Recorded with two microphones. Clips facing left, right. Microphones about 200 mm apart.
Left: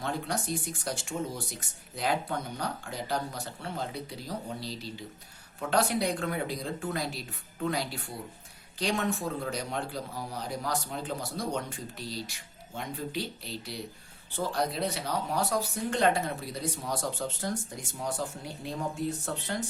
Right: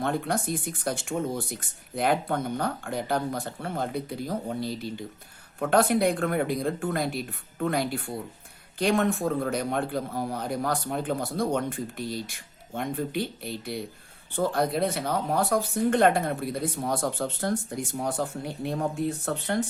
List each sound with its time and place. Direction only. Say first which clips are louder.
0.0 s a man's voice: right 6 dB; 55° right (ahead or behind)